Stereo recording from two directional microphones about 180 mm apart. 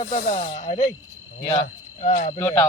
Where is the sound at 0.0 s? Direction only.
55° left (ahead or behind).